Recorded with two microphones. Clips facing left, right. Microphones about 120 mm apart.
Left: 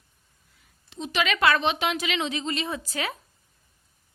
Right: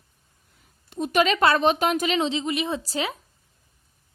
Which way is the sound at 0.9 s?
50° right (ahead or behind).